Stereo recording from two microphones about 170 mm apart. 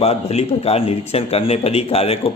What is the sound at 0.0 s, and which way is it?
A man's voice, 40° left (ahead or behind).